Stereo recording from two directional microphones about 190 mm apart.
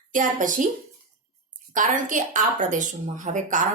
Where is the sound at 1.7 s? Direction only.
45° right (ahead or behind).